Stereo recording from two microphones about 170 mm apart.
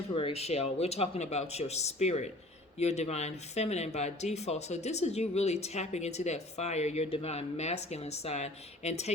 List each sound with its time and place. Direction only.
0.1 s speech: 35° left (ahead or behind)